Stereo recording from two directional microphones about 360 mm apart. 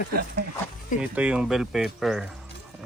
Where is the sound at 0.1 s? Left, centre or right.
Right.